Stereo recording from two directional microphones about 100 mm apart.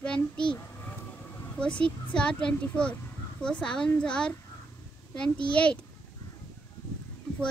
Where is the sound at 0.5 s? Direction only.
25° left (ahead or behind).